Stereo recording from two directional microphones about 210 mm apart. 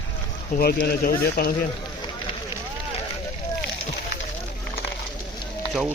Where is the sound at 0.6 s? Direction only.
45° left (ahead or behind).